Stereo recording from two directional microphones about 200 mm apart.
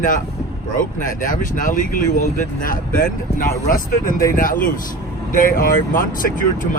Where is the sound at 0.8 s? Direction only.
40° left (ahead or behind).